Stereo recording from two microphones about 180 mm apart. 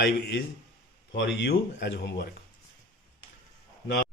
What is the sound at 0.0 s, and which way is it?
Speech, 75° left (ahead or behind).